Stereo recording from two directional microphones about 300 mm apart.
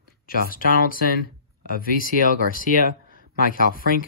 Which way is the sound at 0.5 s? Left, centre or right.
Left.